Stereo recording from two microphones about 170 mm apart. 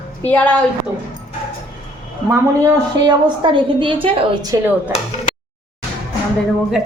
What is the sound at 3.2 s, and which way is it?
A woman's voice, 30° right (ahead or behind).